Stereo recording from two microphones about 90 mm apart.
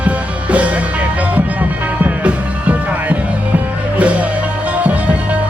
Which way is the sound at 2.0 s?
15° right (ahead or behind).